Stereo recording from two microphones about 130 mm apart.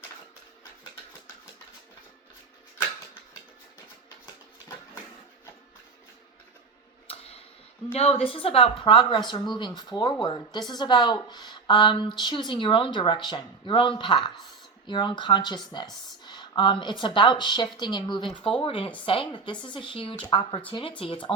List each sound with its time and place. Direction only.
7.1 s tick-tock: 50° left (ahead or behind)
7.9 s speech: 50° left (ahead or behind)
16.2 s a sound: 35° left (ahead or behind)
17.2 s speech: 35° left (ahead or behind)